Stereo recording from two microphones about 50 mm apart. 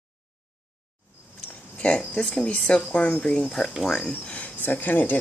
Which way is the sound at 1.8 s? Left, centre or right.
Left.